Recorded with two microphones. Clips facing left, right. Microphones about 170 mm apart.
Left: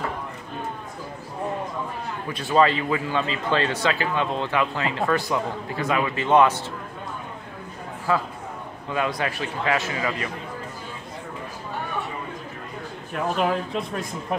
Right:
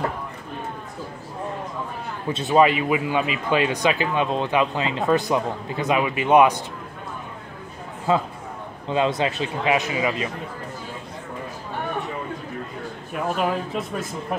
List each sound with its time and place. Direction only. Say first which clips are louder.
2.3 s speech: right 2 dB; 15° right (ahead or behind)
8.1 s a man's voice: right 3 dB; 20° right (ahead or behind)
13.1 s speech: even; centre (ahead or behind)